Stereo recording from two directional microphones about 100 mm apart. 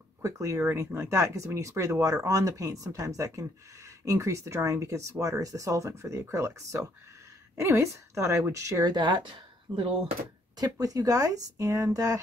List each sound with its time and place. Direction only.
0.2 s speech: 30° right (ahead or behind)
8.9 s speech: 50° right (ahead or behind)
10.6 s speech: 40° right (ahead or behind)